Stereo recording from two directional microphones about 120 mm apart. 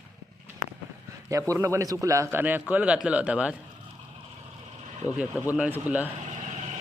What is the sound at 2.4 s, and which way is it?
A man's voice, 15° right (ahead or behind).